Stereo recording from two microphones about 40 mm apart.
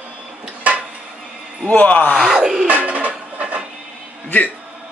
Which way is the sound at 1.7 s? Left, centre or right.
Left.